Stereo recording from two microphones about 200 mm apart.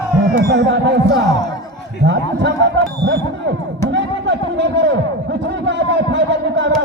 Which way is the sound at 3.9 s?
65° right (ahead or behind).